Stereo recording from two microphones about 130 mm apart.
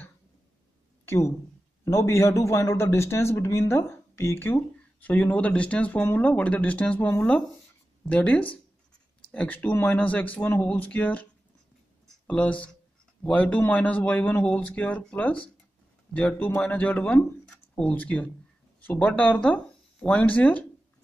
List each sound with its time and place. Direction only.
1.0 s a sound: 20° left (ahead or behind)
1.9 s a man's voice: 20° left (ahead or behind)
12.3 s speech: 10° left (ahead or behind)